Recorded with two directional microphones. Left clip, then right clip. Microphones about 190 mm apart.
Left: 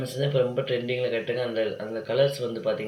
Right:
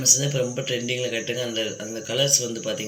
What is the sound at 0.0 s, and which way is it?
Speech, centre (ahead or behind).